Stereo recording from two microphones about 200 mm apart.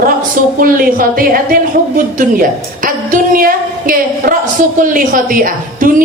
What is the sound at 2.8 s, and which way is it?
A woman's voice, 45° right (ahead or behind).